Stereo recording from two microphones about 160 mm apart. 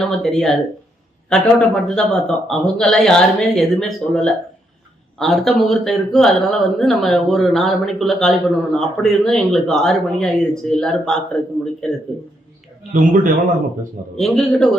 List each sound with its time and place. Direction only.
0.0 s speech: 5° left (ahead or behind)
12.9 s a man's voice: 55° right (ahead or behind)
14.2 s speech: centre (ahead or behind)